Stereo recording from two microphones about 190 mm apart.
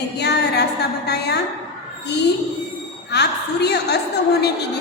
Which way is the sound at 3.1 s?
60° left (ahead or behind).